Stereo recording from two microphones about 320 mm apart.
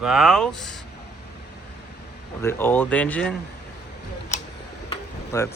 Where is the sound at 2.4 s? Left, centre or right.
Centre.